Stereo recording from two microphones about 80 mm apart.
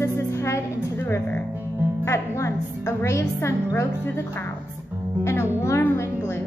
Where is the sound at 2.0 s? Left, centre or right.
Left.